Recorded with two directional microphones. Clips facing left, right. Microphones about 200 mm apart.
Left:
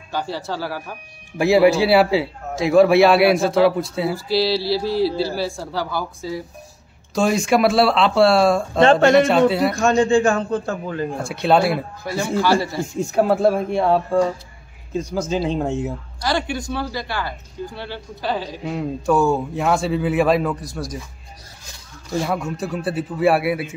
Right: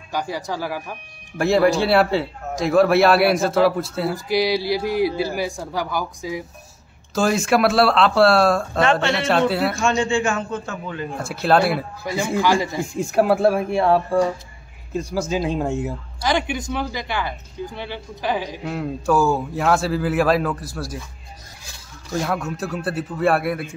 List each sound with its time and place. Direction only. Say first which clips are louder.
0.1 s speech: even; 15° right (ahead or behind)
1.4 s a man's voice: left 3 dB; 5° left (ahead or behind)
4.3 s speech: even; 15° right (ahead or behind)
7.2 s a man's voice: left 1 dB; centre (ahead or behind)
9.0 s a man's voice: left 6 dB; 45° left (ahead or behind)
11.2 s a man's voice: even; centre (ahead or behind)
12.1 s speech: left 1 dB; 10° right (ahead or behind)
15.0 s speech: left 1 dB; 10° right (ahead or behind)
18.6 s a man's voice: left 1 dB; centre (ahead or behind)
19.1 s speech: left 1 dB; 25° left (ahead or behind)
19.5 s a man's voice: even; 5° right (ahead or behind)
22.1 s a man's voice: left 1 dB; 5° left (ahead or behind)